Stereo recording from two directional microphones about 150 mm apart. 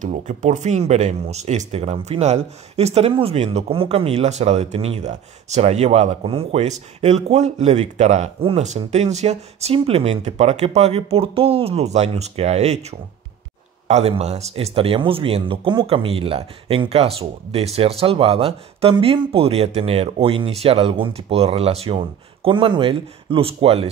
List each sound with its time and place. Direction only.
0.0 s speech: 55° right (ahead or behind)
13.8 s speech: 45° right (ahead or behind)